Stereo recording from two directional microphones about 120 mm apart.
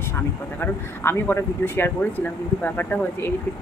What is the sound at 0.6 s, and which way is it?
Speech, 20° left (ahead or behind).